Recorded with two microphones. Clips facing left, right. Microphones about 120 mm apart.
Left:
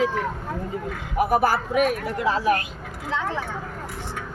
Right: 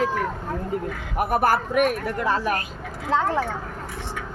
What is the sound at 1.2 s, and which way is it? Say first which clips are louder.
A woman's voice: left 1 dB; 55° right (ahead or behind).